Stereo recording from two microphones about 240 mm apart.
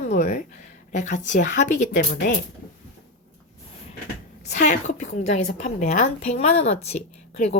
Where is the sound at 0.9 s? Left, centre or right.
Left.